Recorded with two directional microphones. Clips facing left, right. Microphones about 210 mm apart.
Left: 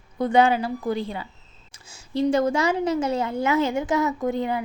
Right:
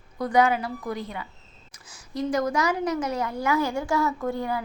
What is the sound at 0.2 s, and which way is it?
A woman's voice, 25° left (ahead or behind).